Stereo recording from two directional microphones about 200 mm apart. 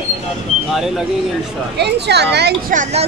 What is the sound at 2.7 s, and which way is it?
Speech, 35° right (ahead or behind).